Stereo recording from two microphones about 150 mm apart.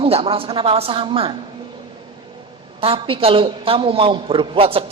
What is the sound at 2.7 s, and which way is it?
A man's voice, 35° right (ahead or behind).